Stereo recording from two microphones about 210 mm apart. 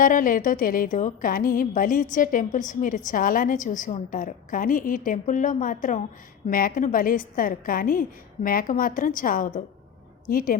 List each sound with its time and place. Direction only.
0.0 s a woman's voice: 40° left (ahead or behind)